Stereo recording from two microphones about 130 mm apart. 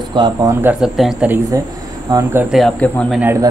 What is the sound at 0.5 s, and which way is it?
Speech, 15° right (ahead or behind).